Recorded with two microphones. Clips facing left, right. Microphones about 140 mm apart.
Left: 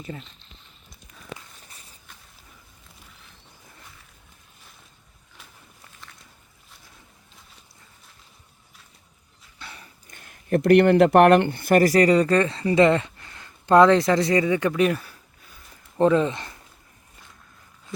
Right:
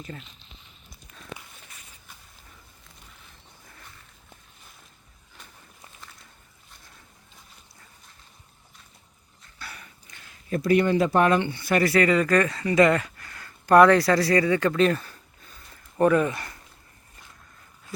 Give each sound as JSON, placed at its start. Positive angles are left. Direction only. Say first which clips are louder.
{"t": 0.0, "sound": "speech", "louder": "left 3 dB", "side_deg": 5}
{"t": 9.6, "sound": "dog", "louder": "even", "side_deg": 25}
{"t": 10.1, "sound": "speech", "louder": "left 7 dB", "side_deg": 50}
{"t": 16.0, "sound": "speech", "louder": "left 1 dB", "side_deg": 20}